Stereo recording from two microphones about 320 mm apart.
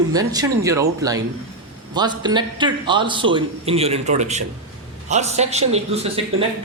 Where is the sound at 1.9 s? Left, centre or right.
Centre.